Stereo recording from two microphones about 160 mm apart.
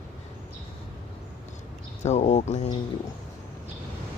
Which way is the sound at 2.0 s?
45° left (ahead or behind).